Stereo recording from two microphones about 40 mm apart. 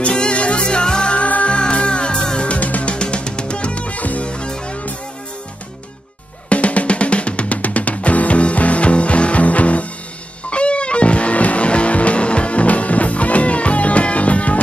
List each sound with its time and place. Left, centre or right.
0.0 s music: left
4.3 s music: left
6.5 s music: left